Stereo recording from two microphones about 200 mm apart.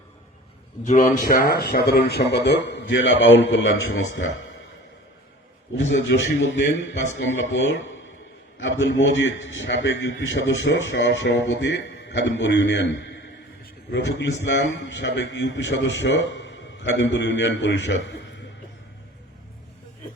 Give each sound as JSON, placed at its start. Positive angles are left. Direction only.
{"t": 0.9, "sound": "a man's voice", "side_deg": 40}
{"t": 5.7, "sound": "a man's voice", "side_deg": 70}